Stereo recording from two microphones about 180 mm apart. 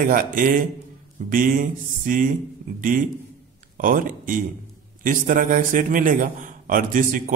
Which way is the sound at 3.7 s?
50° right (ahead or behind).